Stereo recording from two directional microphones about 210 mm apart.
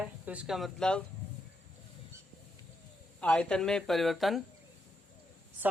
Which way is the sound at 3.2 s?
5° left (ahead or behind).